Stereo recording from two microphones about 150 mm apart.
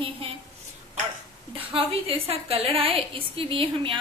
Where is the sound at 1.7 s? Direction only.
40° right (ahead or behind).